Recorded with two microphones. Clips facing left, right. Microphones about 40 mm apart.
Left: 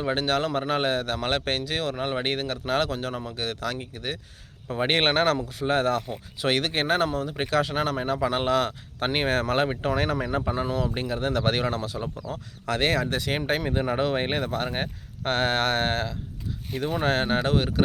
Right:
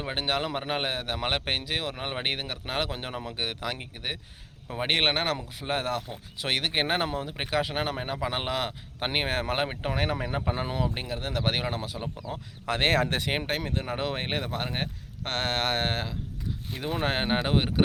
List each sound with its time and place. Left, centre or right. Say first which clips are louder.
0.0 s a man's voice: left 4 dB; centre
2.9 s speech: left 4 dB; right
4.7 s speech: left 3 dB; centre
6.8 s speech: left 4 dB; right
7.3 s a man's voice: left 4 dB; centre
10.5 s speech: left 3 dB; right
10.8 s a man's voice: left 5 dB; centre
12.2 s speech: left 2 dB; right
13.2 s speech: left 2 dB; right
13.8 s a man's voice: left 6 dB; centre